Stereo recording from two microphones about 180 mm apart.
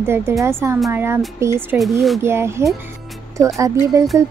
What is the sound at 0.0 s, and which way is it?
Speech, 15° right (ahead or behind).